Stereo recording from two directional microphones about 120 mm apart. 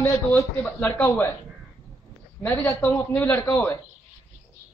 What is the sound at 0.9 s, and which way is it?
Speech, 10° left (ahead or behind).